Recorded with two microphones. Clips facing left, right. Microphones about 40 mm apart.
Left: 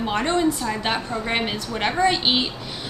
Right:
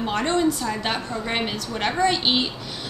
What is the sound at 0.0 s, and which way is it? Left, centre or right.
A woman's voice, centre.